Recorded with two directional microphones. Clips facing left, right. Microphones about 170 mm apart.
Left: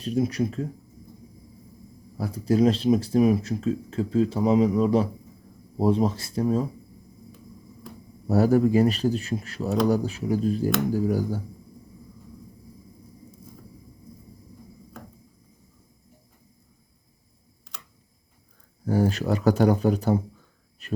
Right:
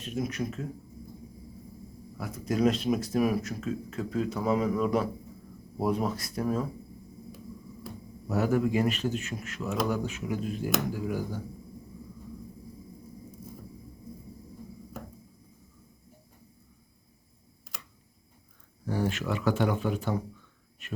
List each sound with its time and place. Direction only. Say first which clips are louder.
0.0 s speech: left 7 dB; 35° left (ahead or behind)
2.1 s speech: left 7 dB; 30° left (ahead or behind)
8.3 s speech: left 7 dB; 35° left (ahead or behind)
18.9 s speech: left 7 dB; 40° left (ahead or behind)